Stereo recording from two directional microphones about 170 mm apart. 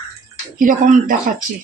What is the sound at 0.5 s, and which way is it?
Speech, 50° right (ahead or behind).